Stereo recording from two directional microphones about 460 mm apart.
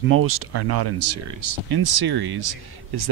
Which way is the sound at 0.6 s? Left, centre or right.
Right.